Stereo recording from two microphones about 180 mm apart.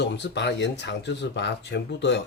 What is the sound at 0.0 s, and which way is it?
Speech, 70° left (ahead or behind).